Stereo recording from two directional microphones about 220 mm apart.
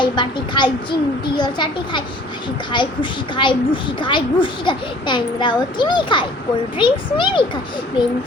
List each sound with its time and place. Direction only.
0.0 s a child's voice: 20° left (ahead or behind)